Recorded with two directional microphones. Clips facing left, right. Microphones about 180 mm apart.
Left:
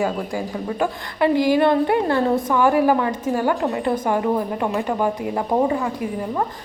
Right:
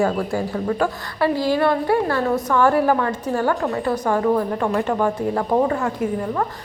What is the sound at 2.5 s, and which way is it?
Speech, 10° left (ahead or behind).